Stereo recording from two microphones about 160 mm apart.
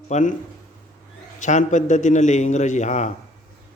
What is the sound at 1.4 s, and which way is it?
Speech, 50° left (ahead or behind).